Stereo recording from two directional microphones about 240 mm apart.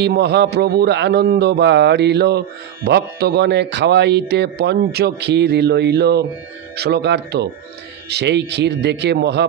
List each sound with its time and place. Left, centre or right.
0.0 s speech: right